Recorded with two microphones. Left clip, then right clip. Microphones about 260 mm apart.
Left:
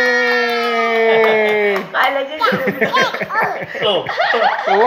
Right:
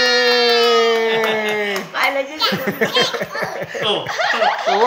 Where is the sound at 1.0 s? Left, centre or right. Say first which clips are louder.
Left 5 dB; right.